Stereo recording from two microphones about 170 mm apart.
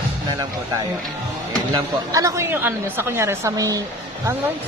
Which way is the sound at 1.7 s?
20° right (ahead or behind).